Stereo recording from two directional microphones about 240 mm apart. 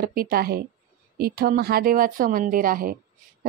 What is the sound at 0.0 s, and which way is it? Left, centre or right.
Speech, right.